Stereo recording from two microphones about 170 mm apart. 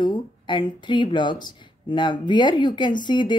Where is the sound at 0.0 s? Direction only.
25° left (ahead or behind).